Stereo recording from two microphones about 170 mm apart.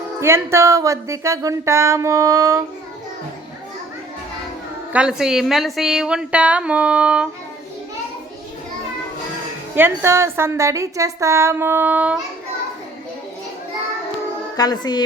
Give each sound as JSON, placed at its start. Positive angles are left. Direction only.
{"t": 0.2, "sound": "speech", "side_deg": -15}
{"t": 4.9, "sound": "a woman's voice", "side_deg": -5}
{"t": 9.7, "sound": "speech", "side_deg": -15}
{"t": 14.5, "sound": "speech", "side_deg": 25}